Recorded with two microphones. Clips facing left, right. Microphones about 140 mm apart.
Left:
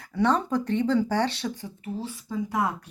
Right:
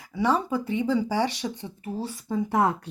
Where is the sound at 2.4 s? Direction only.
60° right (ahead or behind).